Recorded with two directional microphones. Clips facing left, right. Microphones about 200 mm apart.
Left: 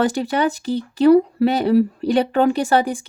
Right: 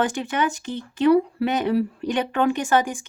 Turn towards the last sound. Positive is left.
turn(degrees=35)  # may be behind; listen again after turning